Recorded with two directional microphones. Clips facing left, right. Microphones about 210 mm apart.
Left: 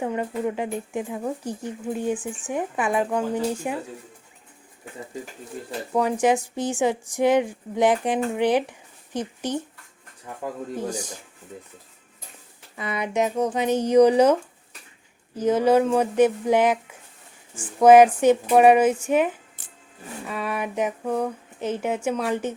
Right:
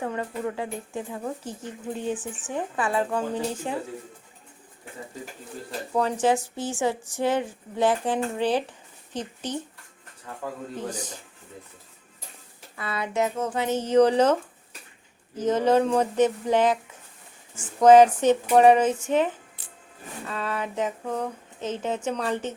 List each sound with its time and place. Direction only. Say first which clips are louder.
0.0 s a woman's voice: left 4 dB; 15° left (ahead or behind)
5.9 s a woman's voice: left 2 dB; 10° left (ahead or behind)
10.8 s a woman's voice: left 3 dB; 10° left (ahead or behind)
12.7 s a woman's voice: left 3 dB; 15° left (ahead or behind)
15.4 s a woman's voice: left 2 dB; 10° left (ahead or behind)
17.7 s a woman's voice: left 2 dB; 10° left (ahead or behind)